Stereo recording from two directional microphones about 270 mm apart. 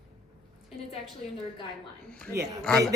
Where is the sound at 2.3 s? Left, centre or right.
Centre.